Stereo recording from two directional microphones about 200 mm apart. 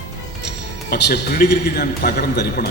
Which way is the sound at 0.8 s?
50° left (ahead or behind).